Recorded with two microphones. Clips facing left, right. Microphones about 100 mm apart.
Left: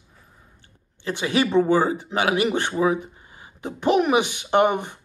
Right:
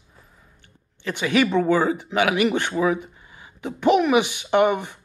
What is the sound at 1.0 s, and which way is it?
Speech, 30° left (ahead or behind).